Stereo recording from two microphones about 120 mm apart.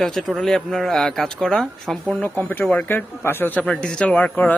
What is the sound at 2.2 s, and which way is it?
Speech, 15° left (ahead or behind).